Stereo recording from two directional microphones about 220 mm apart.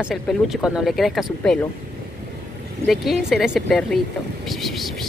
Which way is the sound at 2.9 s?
Centre (ahead or behind).